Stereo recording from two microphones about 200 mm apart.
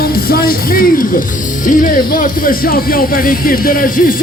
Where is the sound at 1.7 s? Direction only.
45° left (ahead or behind).